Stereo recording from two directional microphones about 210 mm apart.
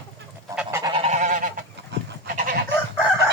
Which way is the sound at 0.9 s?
30° right (ahead or behind).